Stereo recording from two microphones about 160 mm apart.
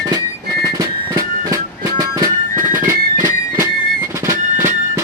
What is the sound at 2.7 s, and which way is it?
Music, 15° right (ahead or behind).